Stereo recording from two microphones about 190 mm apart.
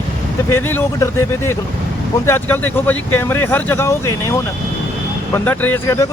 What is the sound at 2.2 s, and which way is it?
Speech, 10° left (ahead or behind).